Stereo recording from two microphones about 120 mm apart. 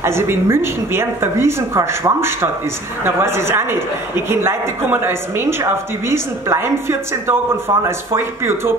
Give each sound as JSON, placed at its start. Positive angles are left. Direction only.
{"t": 0.0, "sound": "a woman's voice", "side_deg": -20}